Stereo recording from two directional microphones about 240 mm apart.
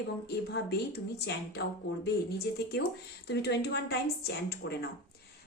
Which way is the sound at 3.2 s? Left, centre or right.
Left.